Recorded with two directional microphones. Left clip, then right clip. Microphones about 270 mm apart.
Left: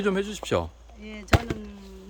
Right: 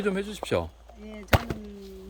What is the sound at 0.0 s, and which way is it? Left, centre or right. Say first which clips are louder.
Speech: left 3 dB; centre.